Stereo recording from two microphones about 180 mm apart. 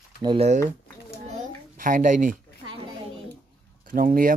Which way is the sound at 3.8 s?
50° right (ahead or behind).